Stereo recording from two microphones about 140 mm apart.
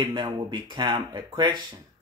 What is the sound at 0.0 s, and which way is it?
Speech, 35° right (ahead or behind).